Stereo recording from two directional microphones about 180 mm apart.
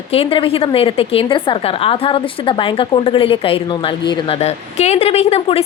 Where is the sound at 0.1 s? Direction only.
30° left (ahead or behind).